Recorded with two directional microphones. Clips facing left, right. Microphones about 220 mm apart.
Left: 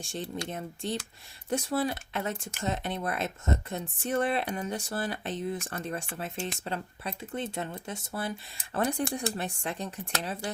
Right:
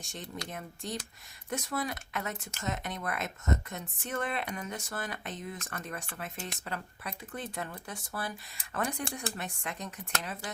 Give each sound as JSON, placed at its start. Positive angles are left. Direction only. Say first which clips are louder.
{"t": 0.0, "sound": "speech", "louder": "left 6 dB", "side_deg": 30}